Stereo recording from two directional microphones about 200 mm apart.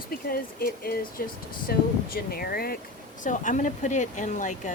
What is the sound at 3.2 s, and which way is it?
Speech, 40° left (ahead or behind).